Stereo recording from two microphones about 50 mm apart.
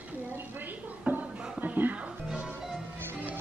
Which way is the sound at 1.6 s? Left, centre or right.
Right.